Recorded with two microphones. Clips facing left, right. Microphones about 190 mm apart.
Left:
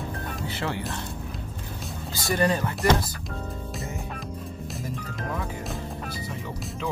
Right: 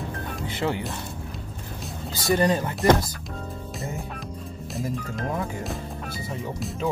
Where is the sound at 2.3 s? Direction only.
20° right (ahead or behind).